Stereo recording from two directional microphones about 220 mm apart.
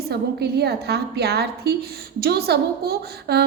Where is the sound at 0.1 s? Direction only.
45° right (ahead or behind).